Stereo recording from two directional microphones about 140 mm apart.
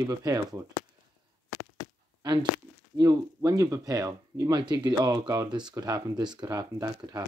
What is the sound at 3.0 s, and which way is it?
Speech, 25° right (ahead or behind).